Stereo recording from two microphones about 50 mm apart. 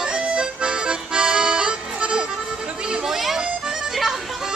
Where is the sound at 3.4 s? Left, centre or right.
Centre.